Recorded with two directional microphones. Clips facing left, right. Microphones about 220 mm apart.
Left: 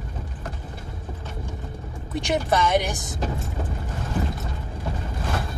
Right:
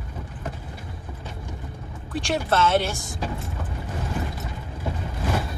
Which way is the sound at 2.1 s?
20° left (ahead or behind).